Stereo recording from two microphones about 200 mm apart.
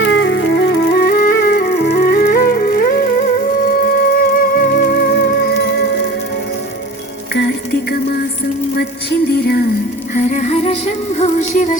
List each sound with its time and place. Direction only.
0.0 s music: 65° left (ahead or behind)
7.3 s music: 55° left (ahead or behind)
10.2 s music: 35° left (ahead or behind)